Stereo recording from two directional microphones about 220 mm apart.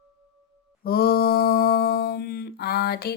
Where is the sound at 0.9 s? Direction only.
45° left (ahead or behind).